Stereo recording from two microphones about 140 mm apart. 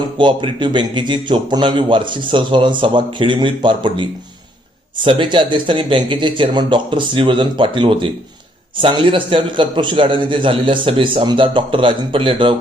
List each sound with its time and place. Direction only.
0.2 s a man's voice: 35° right (ahead or behind)
5.0 s a man's voice: 35° right (ahead or behind)